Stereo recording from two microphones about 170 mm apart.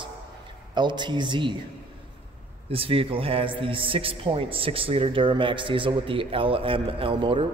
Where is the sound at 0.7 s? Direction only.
25° right (ahead or behind).